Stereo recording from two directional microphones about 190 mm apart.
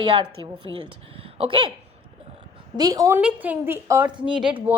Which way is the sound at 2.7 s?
20° right (ahead or behind).